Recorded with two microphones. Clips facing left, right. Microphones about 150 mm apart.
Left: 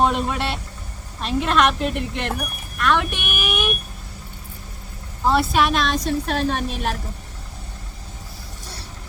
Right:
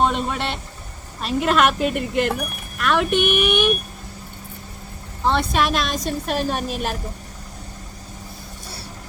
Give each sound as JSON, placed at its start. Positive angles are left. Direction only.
{"t": 0.0, "sound": "a man's voice", "side_deg": 0}
{"t": 5.3, "sound": "a woman's voice", "side_deg": 5}